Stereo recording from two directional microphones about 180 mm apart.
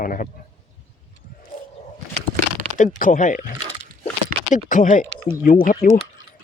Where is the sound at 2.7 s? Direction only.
45° left (ahead or behind).